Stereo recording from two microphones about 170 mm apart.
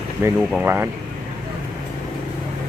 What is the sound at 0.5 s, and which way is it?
Speech, 10° right (ahead or behind).